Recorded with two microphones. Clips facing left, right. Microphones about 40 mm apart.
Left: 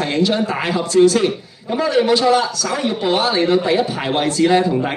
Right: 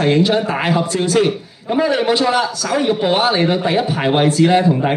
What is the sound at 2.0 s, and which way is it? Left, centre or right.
A man's voice, right.